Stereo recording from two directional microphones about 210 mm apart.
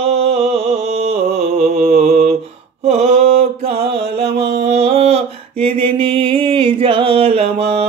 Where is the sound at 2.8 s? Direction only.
30° right (ahead or behind).